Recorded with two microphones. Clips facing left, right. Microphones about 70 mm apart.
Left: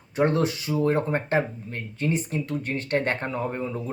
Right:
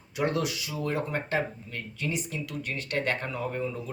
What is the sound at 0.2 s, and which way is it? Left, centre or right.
Speech, left.